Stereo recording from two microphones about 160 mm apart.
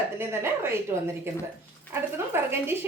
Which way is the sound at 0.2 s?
15° right (ahead or behind).